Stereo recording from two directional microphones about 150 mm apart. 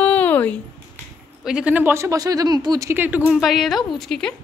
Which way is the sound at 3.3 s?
Centre (ahead or behind).